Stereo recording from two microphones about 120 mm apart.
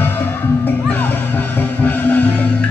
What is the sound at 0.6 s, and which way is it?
Music, 15° left (ahead or behind).